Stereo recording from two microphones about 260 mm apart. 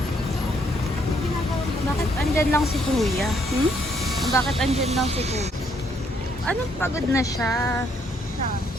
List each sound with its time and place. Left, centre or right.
2.3 s speech: centre
4.7 s speech: right
6.5 s speech: centre